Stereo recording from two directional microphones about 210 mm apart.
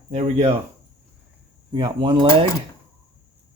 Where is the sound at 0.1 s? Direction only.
30° right (ahead or behind).